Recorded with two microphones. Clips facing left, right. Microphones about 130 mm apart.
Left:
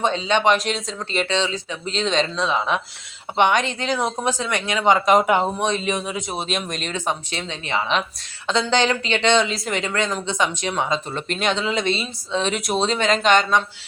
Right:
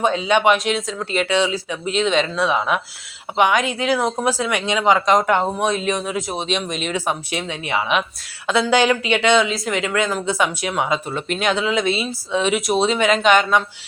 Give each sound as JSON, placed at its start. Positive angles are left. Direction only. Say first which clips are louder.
{"t": 0.0, "sound": "speech", "louder": "right 2 dB", "side_deg": -5}
{"t": 5.5, "sound": "speech", "louder": "right 2 dB", "side_deg": -5}